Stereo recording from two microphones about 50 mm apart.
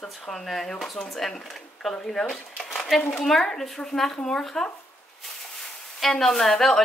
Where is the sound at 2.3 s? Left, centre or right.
Centre.